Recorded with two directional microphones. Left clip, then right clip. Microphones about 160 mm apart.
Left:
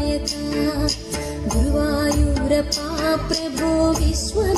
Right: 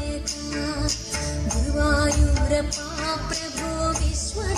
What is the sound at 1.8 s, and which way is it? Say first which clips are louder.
Music: left 2 dB; 35° left (ahead or behind).